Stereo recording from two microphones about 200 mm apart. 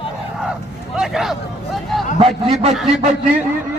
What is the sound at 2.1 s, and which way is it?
Speech, 30° right (ahead or behind).